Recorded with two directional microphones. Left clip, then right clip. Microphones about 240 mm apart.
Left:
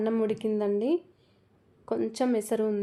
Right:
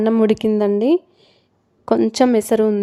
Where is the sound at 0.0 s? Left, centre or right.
Right.